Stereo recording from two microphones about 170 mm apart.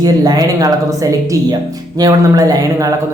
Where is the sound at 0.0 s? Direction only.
25° right (ahead or behind).